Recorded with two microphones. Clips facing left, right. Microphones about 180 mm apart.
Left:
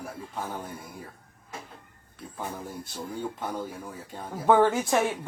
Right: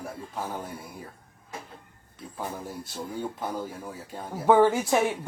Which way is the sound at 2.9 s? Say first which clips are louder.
Right 1 dB; 5° right (ahead or behind).